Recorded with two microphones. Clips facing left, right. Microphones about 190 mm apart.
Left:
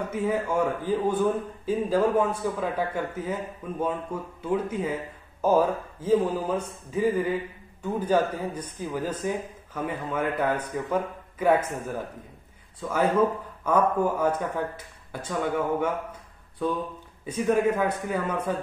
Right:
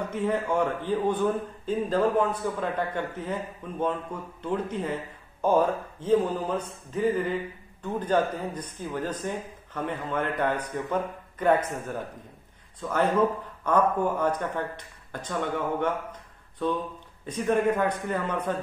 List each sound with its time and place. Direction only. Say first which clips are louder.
0.1 s a man's voice: even; 5° left (ahead or behind)